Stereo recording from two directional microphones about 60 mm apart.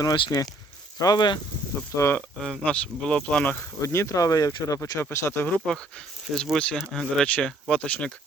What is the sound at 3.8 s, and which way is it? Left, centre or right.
Speech, left.